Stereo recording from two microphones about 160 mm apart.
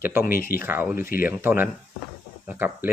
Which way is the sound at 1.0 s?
65° left (ahead or behind).